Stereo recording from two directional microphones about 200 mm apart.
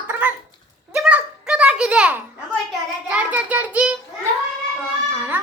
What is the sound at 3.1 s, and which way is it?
Child singing, 5° right (ahead or behind).